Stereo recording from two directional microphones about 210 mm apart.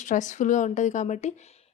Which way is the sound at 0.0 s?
35° left (ahead or behind).